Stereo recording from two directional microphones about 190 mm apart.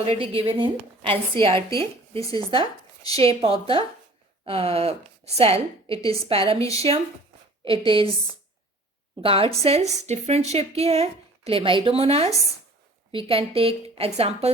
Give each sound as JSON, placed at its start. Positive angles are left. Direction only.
{"t": 0.0, "sound": "a woman's voice", "side_deg": -30}
{"t": 9.2, "sound": "a woman's voice", "side_deg": -30}